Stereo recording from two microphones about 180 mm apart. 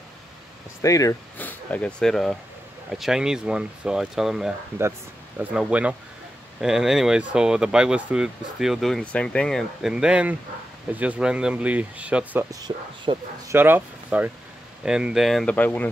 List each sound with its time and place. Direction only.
0.8 s speech: 20° left (ahead or behind); by 12.4 s 10° right (ahead or behind)
12.4 s speech: 20° right (ahead or behind)
13.6 s speech: 10° right (ahead or behind); by 15.9 s 10° left (ahead or behind)